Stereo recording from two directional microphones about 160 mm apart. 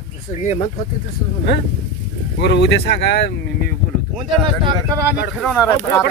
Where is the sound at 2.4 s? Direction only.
90° left.